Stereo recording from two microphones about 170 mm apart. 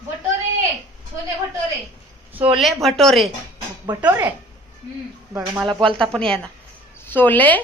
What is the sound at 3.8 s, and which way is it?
Speech, 15° right (ahead or behind).